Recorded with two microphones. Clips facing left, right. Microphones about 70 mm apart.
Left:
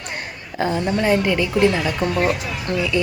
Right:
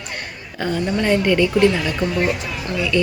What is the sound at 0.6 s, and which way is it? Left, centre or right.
Speech, centre.